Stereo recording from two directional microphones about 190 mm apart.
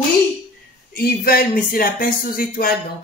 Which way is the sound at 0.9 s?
50° left (ahead or behind).